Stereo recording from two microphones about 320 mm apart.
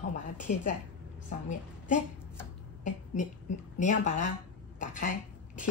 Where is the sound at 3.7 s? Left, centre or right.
Left.